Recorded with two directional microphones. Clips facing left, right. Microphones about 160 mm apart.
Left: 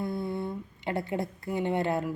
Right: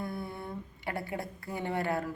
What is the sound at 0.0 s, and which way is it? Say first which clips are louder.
Speech: left 6 dB; 25° left (ahead or behind).